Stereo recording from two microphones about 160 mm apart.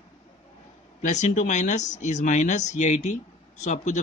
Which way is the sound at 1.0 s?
50° left (ahead or behind).